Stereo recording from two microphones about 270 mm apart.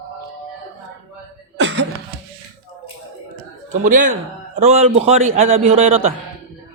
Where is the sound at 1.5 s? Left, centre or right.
Right.